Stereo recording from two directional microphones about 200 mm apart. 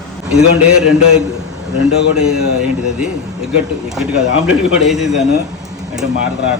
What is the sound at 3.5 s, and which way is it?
A man's voice, 5° right (ahead or behind).